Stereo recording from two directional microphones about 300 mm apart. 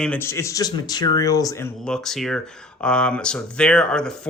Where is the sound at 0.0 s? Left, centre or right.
Centre.